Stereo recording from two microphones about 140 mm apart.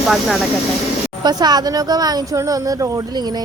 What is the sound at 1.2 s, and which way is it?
A woman's voice, 30° right (ahead or behind).